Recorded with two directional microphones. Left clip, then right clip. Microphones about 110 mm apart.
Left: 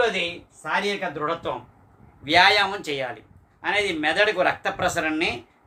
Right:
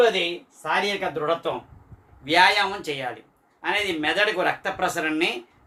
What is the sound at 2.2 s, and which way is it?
Speech, 40° left (ahead or behind).